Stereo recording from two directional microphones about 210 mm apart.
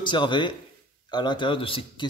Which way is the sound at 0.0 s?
20° left (ahead or behind).